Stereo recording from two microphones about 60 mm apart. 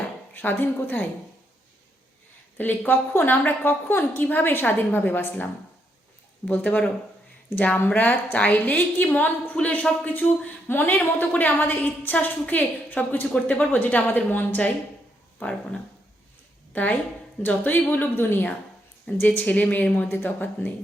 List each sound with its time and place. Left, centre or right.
0.3 s a woman's voice: left
2.6 s a woman's voice: left
6.5 s a woman's voice: left
10.7 s a woman's voice: left
16.7 s a woman's voice: left
20.1 s a woman's voice: left